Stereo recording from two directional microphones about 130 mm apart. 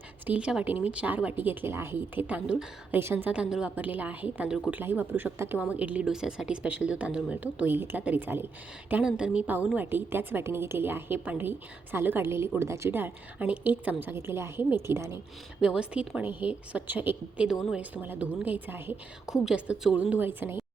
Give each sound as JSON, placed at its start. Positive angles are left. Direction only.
{"t": 0.3, "sound": "a woman's voice", "side_deg": -10}
{"t": 4.8, "sound": "a woman's voice", "side_deg": -15}
{"t": 15.6, "sound": "a woman's voice", "side_deg": -10}
{"t": 19.2, "sound": "a woman's voice", "side_deg": -5}